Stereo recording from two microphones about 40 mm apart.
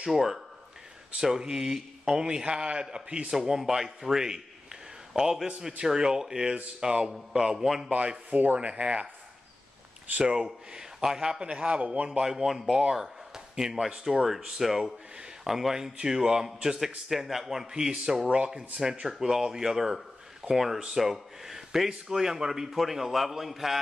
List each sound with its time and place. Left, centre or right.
0.0 s a man's voice: centre
5.7 s a man's voice: right
7.5 s a man's voice: centre
7.9 s a man's voice: right
10.1 s a man's voice: right
11.4 s a man's voice: right
12.1 s a man's voice: centre